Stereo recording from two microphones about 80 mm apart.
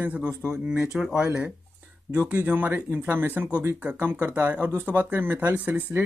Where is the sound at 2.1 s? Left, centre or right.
Right.